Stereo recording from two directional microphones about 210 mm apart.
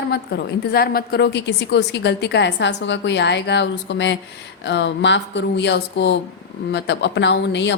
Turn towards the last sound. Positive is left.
turn(degrees=55)  # may be behind; listen again after turning